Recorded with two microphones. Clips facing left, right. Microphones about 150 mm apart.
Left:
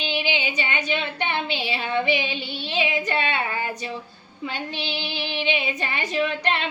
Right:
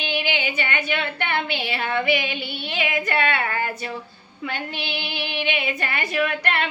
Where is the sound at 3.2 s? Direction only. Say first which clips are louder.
Right 5 dB; 60° right (ahead or behind).